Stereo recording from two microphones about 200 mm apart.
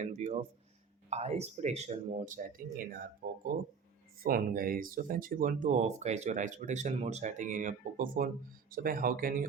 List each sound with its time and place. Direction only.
0.0 s speech: 35° right (ahead or behind)